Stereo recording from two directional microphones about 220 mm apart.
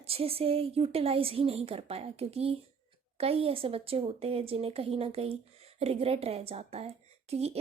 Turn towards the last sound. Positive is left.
turn(degrees=-30)  # may be behind; listen again after turning